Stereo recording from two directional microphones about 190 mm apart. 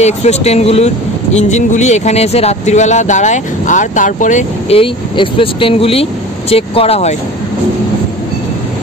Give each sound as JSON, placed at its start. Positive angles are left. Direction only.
{"t": 0.0, "sound": "speech", "side_deg": 35}